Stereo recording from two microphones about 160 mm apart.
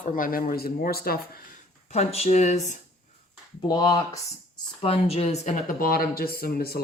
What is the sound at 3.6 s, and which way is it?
Speech, 25° left (ahead or behind).